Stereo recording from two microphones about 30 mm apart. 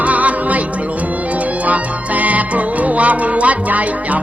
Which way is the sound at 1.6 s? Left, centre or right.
Right.